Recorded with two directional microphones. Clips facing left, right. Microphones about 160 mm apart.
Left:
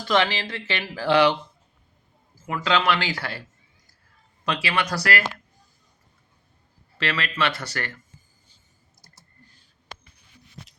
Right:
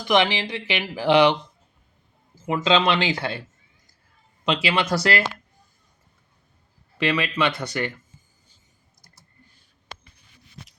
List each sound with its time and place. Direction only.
0.0 s speech: 15° right (ahead or behind)
2.3 s a sound: 20° right (ahead or behind)
2.6 s speech: 20° right (ahead or behind)
4.4 s speech: 20° right (ahead or behind)
7.0 s speech: 15° right (ahead or behind)